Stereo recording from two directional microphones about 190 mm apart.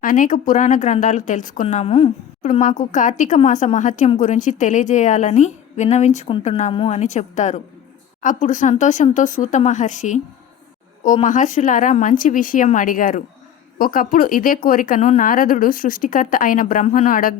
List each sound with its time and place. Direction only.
0.0 s a woman's voice: 45° left (ahead or behind)